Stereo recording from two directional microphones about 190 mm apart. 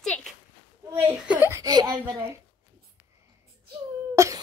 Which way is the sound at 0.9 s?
15° right (ahead or behind).